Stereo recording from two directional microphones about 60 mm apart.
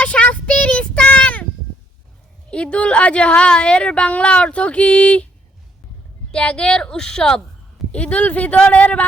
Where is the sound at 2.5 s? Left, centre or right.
Centre.